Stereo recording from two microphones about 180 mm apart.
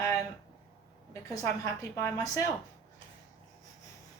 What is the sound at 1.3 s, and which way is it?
A woman's voice, 15° left (ahead or behind).